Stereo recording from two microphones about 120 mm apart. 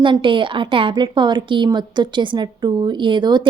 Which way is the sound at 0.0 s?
45° right (ahead or behind).